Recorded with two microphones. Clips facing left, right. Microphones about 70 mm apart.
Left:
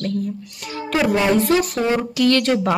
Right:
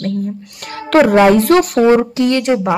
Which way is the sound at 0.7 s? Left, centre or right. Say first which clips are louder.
Right 9 dB; right.